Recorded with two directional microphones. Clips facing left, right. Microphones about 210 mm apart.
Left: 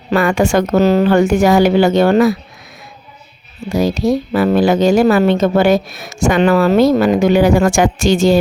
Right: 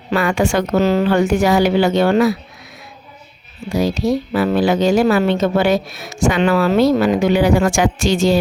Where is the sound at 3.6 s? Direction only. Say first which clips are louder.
Left 3 dB; 45° left (ahead or behind).